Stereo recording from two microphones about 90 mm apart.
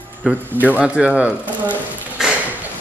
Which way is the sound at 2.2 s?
5° right (ahead or behind).